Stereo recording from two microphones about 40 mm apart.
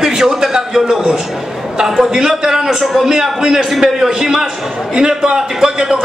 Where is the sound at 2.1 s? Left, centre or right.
Centre.